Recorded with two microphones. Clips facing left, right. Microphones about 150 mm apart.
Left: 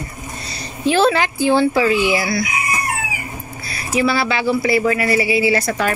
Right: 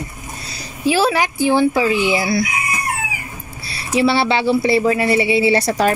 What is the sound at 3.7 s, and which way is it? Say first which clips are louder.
Speech: right 2 dB; 30° right (ahead or behind).